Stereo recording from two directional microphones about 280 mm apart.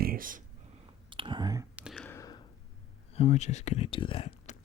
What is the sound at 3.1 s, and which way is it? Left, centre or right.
Speech, left.